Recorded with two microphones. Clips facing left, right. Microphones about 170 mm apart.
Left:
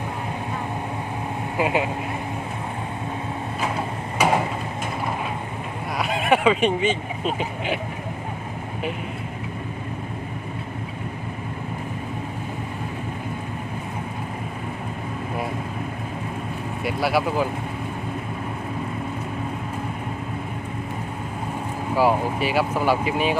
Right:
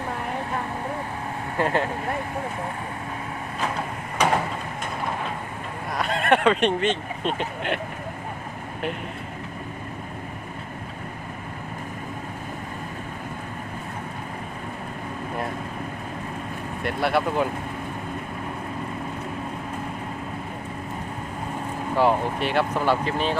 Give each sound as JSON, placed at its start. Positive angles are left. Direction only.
{"t": 1.5, "sound": "speech", "side_deg": 10}
{"t": 4.2, "sound": "a sound", "side_deg": 5}
{"t": 6.0, "sound": "speech", "side_deg": 5}
{"t": 16.8, "sound": "speech", "side_deg": 5}
{"t": 21.9, "sound": "speech", "side_deg": 5}